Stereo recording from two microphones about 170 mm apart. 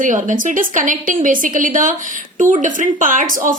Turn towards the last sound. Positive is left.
turn(degrees=-50)  # may be behind; listen again after turning